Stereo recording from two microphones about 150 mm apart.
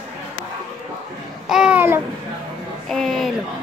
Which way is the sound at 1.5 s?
5° right (ahead or behind).